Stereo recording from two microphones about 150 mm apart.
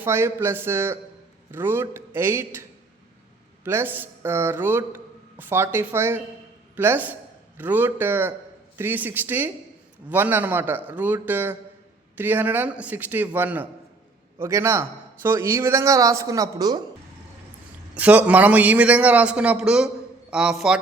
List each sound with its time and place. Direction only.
0.0 s a man's voice: 15° right (ahead or behind)
17.9 s a man's voice: 10° right (ahead or behind)